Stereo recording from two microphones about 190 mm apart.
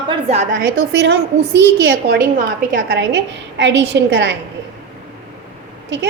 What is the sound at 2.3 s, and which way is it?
Speech, 45° right (ahead or behind).